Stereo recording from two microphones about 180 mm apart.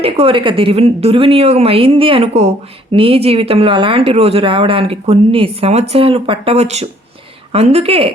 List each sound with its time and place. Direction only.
0.0 s speech: 30° right (ahead or behind)